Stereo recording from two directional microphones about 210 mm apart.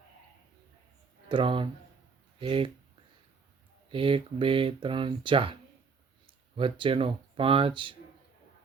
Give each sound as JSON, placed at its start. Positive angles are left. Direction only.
{"t": 1.3, "sound": "speech", "side_deg": -25}
{"t": 3.8, "sound": "speech", "side_deg": -25}
{"t": 6.6, "sound": "speech", "side_deg": -25}